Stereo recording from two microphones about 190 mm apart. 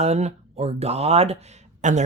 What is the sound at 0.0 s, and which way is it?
Speech, 35° right (ahead or behind).